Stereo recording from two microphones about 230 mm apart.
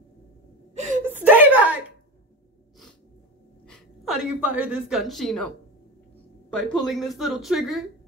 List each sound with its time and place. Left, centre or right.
0.7 s whimper: right
1.0 s chuckle: centre
3.6 s a woman's voice: centre
6.5 s speech: centre